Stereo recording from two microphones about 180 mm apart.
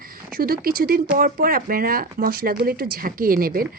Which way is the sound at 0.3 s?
55° right (ahead or behind).